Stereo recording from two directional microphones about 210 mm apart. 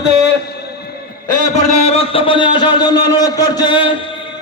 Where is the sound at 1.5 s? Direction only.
30° left (ahead or behind).